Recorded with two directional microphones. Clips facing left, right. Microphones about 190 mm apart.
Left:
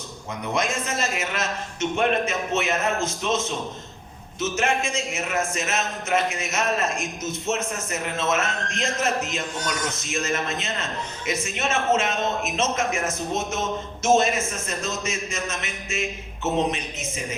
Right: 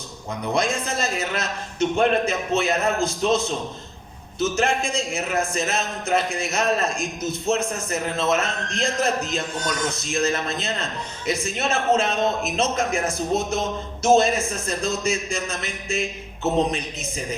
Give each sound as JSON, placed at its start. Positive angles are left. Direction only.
{"t": 0.5, "sound": "a man's voice", "side_deg": -35}